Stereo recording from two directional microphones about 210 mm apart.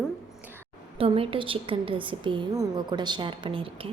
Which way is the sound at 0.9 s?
25° right (ahead or behind).